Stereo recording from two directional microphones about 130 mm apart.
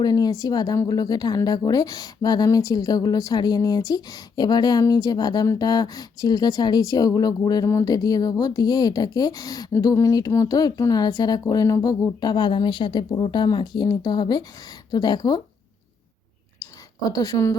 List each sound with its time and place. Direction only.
0.0 s speech: 30° left (ahead or behind)
17.1 s speech: 30° left (ahead or behind)